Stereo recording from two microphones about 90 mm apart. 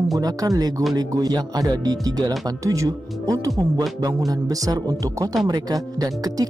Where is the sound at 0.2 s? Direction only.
40° right (ahead or behind).